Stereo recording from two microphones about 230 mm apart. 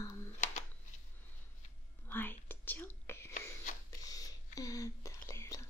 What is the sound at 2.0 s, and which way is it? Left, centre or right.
Whispering, centre.